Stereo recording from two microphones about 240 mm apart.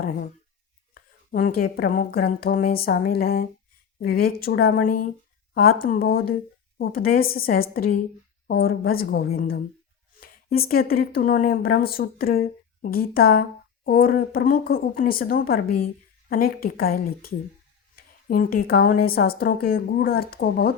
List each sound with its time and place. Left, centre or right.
0.9 s speech: left